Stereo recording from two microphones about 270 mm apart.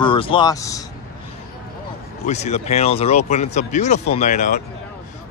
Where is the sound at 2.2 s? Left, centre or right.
Left.